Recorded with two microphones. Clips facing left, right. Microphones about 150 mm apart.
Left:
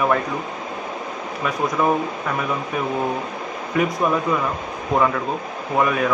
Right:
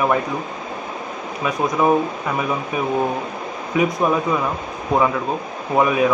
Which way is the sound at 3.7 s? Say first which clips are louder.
Right 2 dB; 15° right (ahead or behind).